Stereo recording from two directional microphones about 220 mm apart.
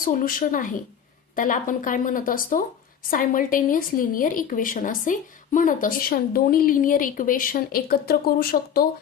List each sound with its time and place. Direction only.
0.0 s a woman's voice: 40° left (ahead or behind)